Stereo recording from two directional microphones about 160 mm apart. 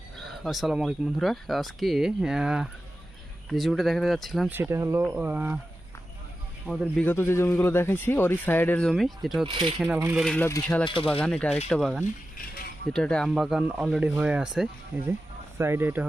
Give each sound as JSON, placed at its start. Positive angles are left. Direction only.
{"t": 0.2, "sound": "speech", "side_deg": 0}
{"t": 4.5, "sound": "speech", "side_deg": -15}
{"t": 6.7, "sound": "speech", "side_deg": 5}
{"t": 9.5, "sound": "speech", "side_deg": -35}
{"t": 9.8, "sound": "speech", "side_deg": -10}
{"t": 10.2, "sound": "speech", "side_deg": 10}
{"t": 10.8, "sound": "speech", "side_deg": 35}
{"t": 11.1, "sound": "speech", "side_deg": 10}